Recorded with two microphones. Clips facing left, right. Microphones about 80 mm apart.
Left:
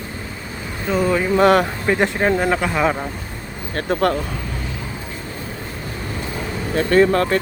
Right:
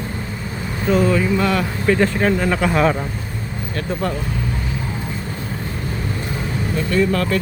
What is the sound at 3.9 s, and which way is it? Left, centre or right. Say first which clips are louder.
Speech: left 6 dB; left.